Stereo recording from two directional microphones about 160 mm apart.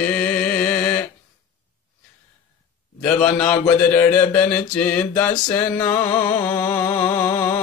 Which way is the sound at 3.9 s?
10° left (ahead or behind).